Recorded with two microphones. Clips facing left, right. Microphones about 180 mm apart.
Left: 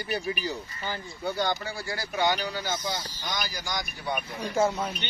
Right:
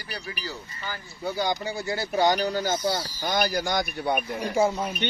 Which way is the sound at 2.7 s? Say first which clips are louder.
Right 6 dB; 10° right (ahead or behind).